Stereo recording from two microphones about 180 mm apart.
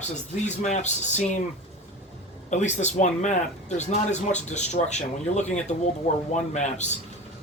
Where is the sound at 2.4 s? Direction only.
40° left (ahead or behind).